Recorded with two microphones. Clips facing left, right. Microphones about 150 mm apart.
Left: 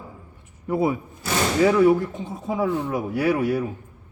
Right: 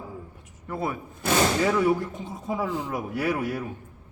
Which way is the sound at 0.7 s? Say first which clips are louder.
Left 8 dB; 15° left (ahead or behind).